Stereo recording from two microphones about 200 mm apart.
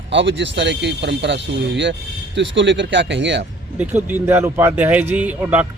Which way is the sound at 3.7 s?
10° right (ahead or behind).